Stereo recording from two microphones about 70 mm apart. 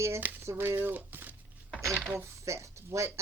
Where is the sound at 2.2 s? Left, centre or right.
Right.